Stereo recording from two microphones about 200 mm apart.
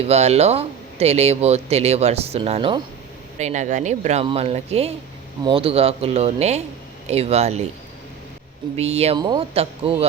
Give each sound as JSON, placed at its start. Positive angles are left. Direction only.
{"t": 0.1, "sound": "speech", "side_deg": -30}
{"t": 3.3, "sound": "speech", "side_deg": -35}
{"t": 8.7, "sound": "speech", "side_deg": -30}